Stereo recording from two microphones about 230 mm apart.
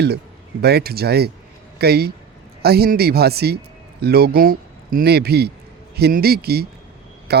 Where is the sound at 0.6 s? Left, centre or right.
Right.